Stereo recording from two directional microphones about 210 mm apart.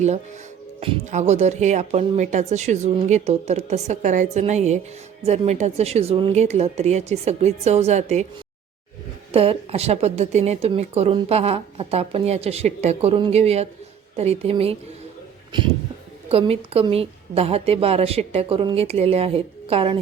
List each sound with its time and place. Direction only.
0.8 s speech: 30° right (ahead or behind)
9.3 s speech: 25° right (ahead or behind)
16.3 s speech: 30° right (ahead or behind)